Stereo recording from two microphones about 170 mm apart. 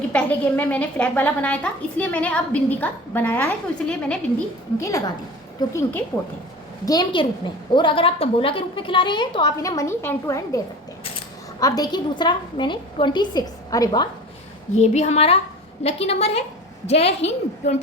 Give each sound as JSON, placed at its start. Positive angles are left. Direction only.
{"t": 0.1, "sound": "a woman's voice", "side_deg": 10}
{"t": 4.8, "sound": "a woman's voice", "side_deg": 20}
{"t": 11.6, "sound": "a woman's voice", "side_deg": 20}
{"t": 14.8, "sound": "a woman's voice", "side_deg": 40}